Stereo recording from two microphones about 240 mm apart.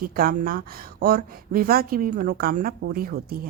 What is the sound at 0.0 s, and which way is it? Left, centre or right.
A woman's voice, right.